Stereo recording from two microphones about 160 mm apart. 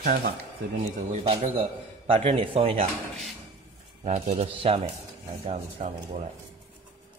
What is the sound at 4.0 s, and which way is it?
Speech, 45° right (ahead or behind).